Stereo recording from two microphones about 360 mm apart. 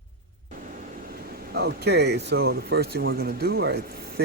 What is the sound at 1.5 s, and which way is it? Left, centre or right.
A man's voice, right.